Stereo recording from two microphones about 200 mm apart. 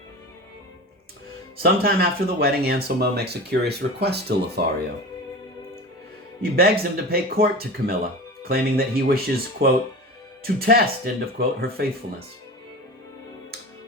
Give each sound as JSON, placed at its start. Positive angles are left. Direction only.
{"t": 1.6, "sound": "speech", "side_deg": -50}
{"t": 6.4, "sound": "speech", "side_deg": -50}